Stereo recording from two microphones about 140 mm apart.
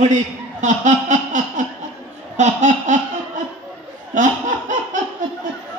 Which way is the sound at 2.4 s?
55° right (ahead or behind).